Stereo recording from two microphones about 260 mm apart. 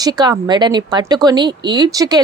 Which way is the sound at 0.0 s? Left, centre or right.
Centre.